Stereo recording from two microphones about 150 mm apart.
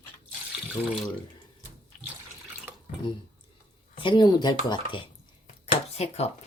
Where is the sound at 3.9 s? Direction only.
35° left (ahead or behind).